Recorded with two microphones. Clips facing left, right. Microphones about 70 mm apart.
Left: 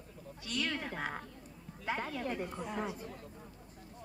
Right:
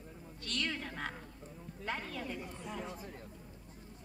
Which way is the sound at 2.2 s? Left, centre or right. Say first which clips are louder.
Left 5 dB; left.